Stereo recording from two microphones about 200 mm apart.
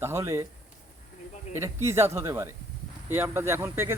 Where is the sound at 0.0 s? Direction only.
15° right (ahead or behind).